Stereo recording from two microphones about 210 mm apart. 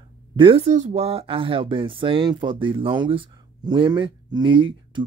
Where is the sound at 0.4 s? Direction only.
25° right (ahead or behind).